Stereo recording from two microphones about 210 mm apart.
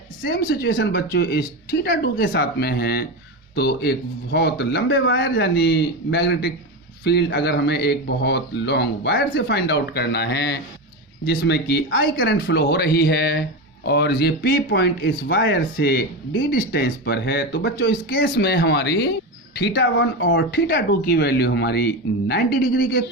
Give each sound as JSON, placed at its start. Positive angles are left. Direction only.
{"t": 0.3, "sound": "speech", "side_deg": 45}
{"t": 5.3, "sound": "speech", "side_deg": 50}